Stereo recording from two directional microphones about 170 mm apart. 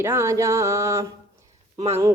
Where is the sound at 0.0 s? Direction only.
15° right (ahead or behind).